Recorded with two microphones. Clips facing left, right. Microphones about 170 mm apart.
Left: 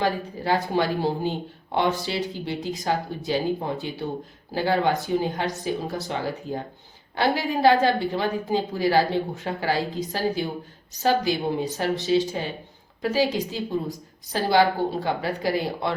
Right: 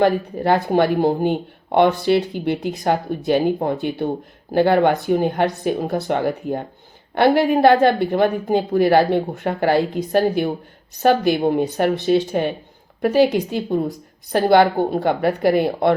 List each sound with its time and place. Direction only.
0.0 s speech: 60° right (ahead or behind)